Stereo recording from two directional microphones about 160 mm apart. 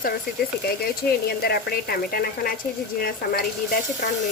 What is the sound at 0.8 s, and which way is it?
Speech, 75° left (ahead or behind).